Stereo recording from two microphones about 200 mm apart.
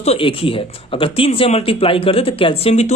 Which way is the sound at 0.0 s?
30° left (ahead or behind).